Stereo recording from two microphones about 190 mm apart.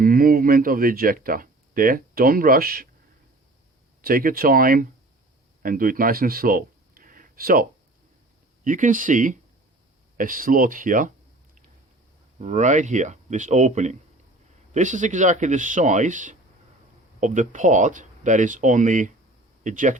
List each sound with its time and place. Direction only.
0.0 s speech: 50° right (ahead or behind)
4.0 s speech: 50° right (ahead or behind)
12.4 s speech: 40° right (ahead or behind)